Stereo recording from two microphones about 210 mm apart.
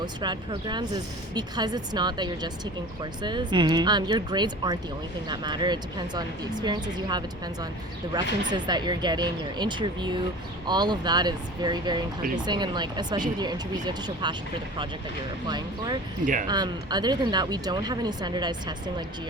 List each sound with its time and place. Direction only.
0.0 s speech: 20° right (ahead or behind)
15.4 s speech: 20° right (ahead or behind)
16.2 s speech: 40° right (ahead or behind)
16.5 s speech: 20° right (ahead or behind)